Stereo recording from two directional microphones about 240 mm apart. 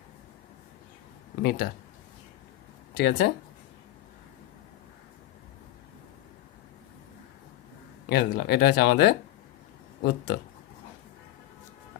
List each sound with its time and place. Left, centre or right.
1.4 s speech: left
3.0 s speech: left
8.1 s speech: left